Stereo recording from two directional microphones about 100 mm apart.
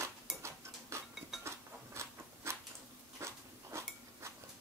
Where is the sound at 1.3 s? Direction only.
5° right (ahead or behind).